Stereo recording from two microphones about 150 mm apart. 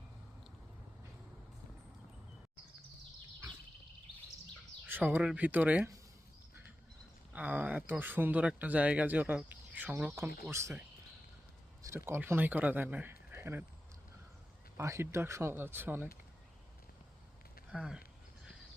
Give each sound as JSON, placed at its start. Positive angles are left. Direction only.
{"t": 4.9, "sound": "speech", "side_deg": -10}
{"t": 7.3, "sound": "speech", "side_deg": -10}
{"t": 14.8, "sound": "speech", "side_deg": -20}
{"t": 17.7, "sound": "speech", "side_deg": -5}